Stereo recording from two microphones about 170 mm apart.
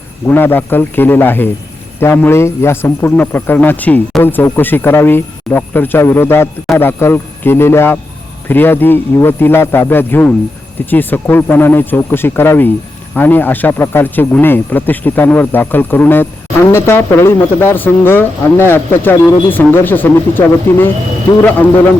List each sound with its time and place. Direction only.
0.3 s a man's voice: 10° left (ahead or behind)